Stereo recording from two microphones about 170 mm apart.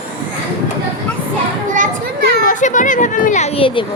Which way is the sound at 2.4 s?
50° left (ahead or behind).